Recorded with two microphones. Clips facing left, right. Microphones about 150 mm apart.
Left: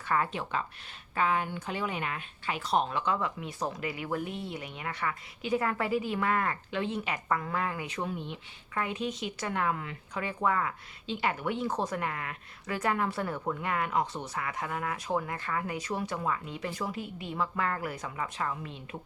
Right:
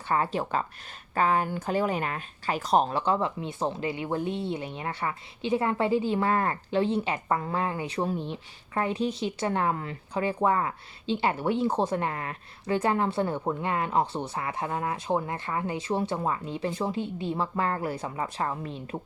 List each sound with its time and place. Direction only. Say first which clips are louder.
0.1 s speech: right 4 dB; 30° right (ahead or behind)